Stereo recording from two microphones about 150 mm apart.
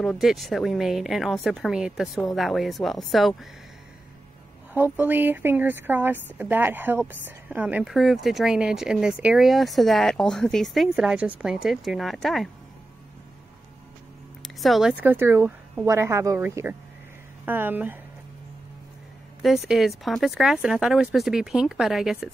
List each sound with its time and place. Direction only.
0.0 s a woman's voice: centre (ahead or behind)
4.7 s a woman's voice: 15° right (ahead or behind)
14.4 s a woman's voice: centre (ahead or behind)
19.4 s a woman's voice: centre (ahead or behind)